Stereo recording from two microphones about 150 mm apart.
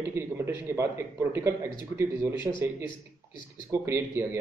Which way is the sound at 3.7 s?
20° right (ahead or behind).